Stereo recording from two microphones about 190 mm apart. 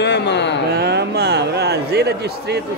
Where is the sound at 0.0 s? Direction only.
65° left (ahead or behind).